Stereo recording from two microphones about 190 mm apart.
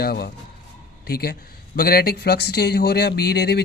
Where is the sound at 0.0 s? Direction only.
55° left (ahead or behind).